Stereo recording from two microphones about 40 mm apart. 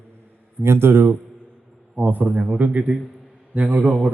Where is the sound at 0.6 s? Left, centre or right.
Right.